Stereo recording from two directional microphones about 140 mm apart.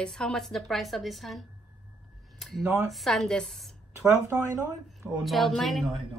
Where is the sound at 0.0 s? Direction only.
5° left (ahead or behind).